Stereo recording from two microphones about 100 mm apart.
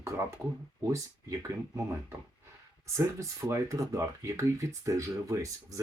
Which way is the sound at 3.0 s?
30° right (ahead or behind).